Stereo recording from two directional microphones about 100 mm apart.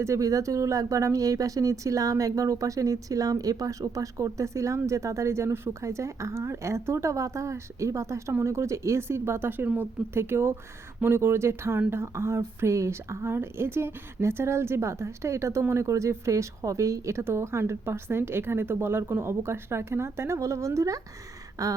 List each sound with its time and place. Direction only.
0.0 s a woman's voice: 30° right (ahead or behind)